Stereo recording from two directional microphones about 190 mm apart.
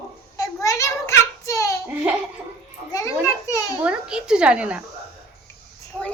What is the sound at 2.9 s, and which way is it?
Children playing, 15° left (ahead or behind).